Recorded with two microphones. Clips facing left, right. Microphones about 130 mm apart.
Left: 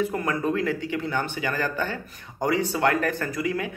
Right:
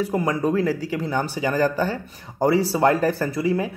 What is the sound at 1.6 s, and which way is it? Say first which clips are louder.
Speech: right 6 dB; 35° right (ahead or behind).